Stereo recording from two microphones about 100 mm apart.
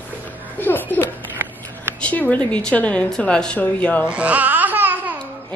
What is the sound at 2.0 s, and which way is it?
Speech, 15° left (ahead or behind).